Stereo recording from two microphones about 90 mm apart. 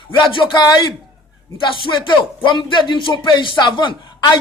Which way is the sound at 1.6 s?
65° left (ahead or behind).